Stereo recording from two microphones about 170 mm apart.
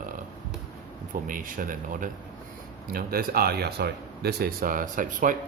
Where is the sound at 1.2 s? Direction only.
55° right (ahead or behind).